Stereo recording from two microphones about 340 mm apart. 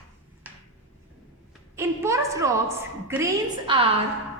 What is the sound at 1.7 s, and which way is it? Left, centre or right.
A woman's voice, centre.